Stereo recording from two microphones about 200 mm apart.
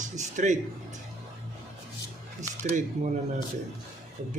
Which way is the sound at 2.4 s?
35° right (ahead or behind).